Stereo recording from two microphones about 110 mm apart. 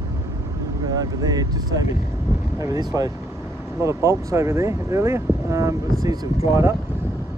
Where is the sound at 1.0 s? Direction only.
35° right (ahead or behind).